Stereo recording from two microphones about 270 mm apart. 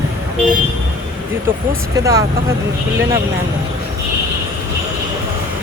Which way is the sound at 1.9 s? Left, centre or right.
Centre.